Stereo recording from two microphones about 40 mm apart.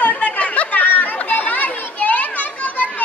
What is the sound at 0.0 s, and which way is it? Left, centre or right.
Chatter, left.